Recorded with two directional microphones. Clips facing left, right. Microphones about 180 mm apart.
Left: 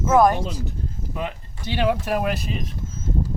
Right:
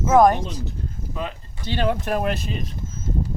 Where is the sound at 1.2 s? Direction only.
15° left (ahead or behind).